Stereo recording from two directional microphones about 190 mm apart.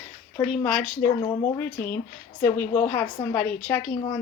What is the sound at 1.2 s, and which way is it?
A woman's voice, 15° left (ahead or behind).